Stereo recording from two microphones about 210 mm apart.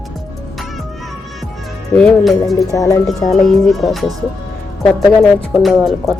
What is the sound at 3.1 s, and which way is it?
Speech, centre (ahead or behind).